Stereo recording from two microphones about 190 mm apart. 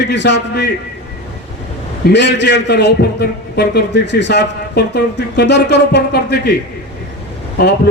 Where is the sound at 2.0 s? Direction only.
65° left (ahead or behind).